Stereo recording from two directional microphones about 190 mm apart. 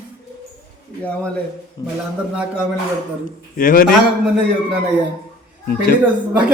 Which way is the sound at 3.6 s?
45° left (ahead or behind).